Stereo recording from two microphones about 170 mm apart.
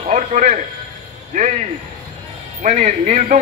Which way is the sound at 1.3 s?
45° right (ahead or behind).